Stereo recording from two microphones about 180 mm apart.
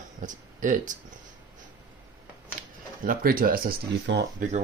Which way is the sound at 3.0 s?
55° right (ahead or behind).